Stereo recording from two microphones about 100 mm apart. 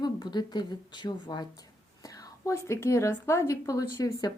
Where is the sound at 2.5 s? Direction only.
30° left (ahead or behind).